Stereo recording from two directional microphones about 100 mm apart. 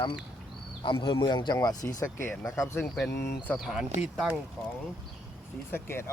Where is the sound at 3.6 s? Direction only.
5° right (ahead or behind).